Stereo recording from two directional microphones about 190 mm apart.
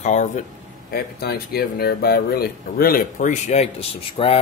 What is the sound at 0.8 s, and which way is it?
Speech, 55° left (ahead or behind).